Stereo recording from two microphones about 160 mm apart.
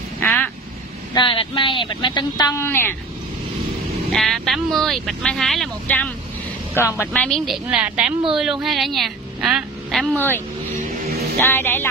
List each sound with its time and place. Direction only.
0.2 s quack: 10° left (ahead or behind)
1.1 s speech: 30° left (ahead or behind)
2.6 s music: 15° left (ahead or behind)
4.1 s a woman's voice: centre (ahead or behind)
10.1 s music: 15° left (ahead or behind)